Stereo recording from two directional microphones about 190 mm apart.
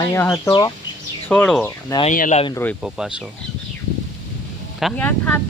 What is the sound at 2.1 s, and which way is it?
Speech, 40° left (ahead or behind).